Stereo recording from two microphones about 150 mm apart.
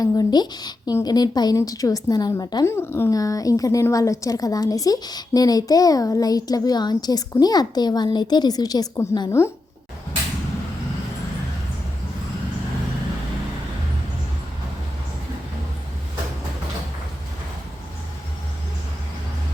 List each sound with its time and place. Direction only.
0.0 s a woman's voice: 25° left (ahead or behind)